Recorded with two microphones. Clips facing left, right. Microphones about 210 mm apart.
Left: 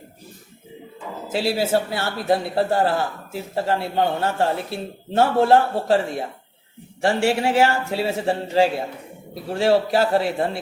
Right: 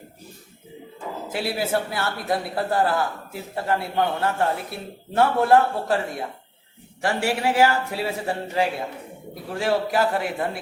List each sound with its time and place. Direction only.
1.3 s a man's voice: 25° left (ahead or behind)